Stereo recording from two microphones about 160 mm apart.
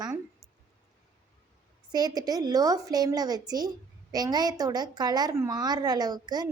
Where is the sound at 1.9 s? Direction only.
25° right (ahead or behind).